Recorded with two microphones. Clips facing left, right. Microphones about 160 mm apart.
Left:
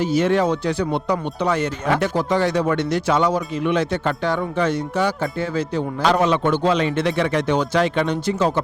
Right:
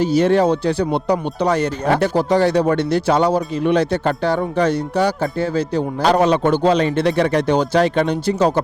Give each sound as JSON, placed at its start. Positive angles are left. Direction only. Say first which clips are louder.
{"t": 0.0, "sound": "speech", "louder": "right 4 dB", "side_deg": -35}